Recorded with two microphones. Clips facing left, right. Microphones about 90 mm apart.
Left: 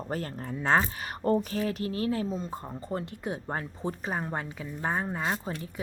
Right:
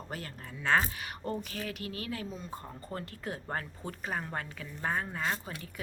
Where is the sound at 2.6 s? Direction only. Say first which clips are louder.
Left 6 dB; 20° left (ahead or behind).